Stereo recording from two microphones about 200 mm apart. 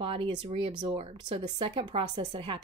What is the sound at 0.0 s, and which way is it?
Speech, 25° right (ahead or behind).